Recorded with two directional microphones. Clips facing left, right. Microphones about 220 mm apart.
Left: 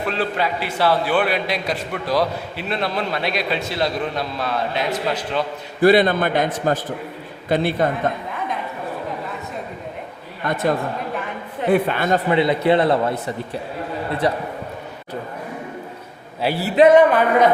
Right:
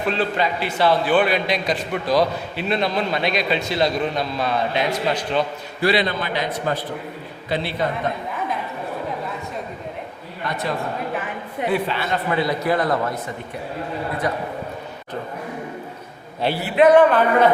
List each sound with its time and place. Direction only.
0.1 s a man's voice: 5° left (ahead or behind)
5.8 s a man's voice: 50° left (ahead or behind)
10.5 s a man's voice: 50° left (ahead or behind)
12.3 s a man's voice: 25° left (ahead or behind)
16.4 s a man's voice: 5° left (ahead or behind)